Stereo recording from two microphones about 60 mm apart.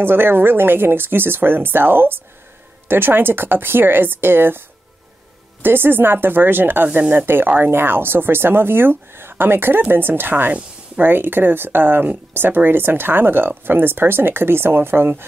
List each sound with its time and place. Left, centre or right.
0.0 s speech: right